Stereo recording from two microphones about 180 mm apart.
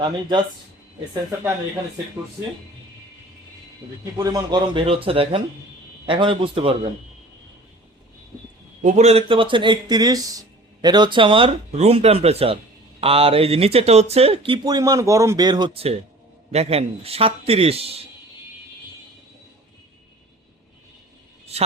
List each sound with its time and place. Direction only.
0.0 s speech: 25° right (ahead or behind)
4.2 s speech: 20° right (ahead or behind)
8.8 s speech: 40° right (ahead or behind)